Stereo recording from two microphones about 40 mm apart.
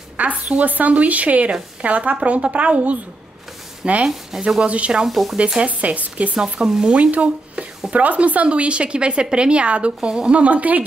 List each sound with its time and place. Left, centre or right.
0.2 s a woman's voice: right
4.0 s speech: centre
4.6 s a woman's voice: right
5.0 s speech: centre
5.6 s a woman's voice: right
6.3 s speech: centre
7.0 s speech: right
10.4 s a woman's voice: right